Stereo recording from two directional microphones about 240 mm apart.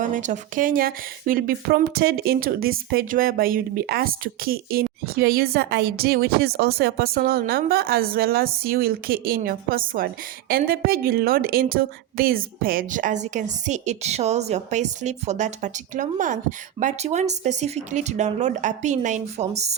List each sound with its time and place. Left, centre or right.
0.0 s speech: right